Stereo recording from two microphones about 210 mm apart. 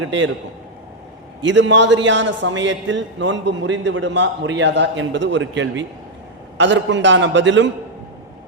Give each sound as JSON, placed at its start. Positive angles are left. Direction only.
{"t": 0.0, "sound": "a man's voice", "side_deg": -60}
{"t": 1.4, "sound": "a man's voice", "side_deg": -60}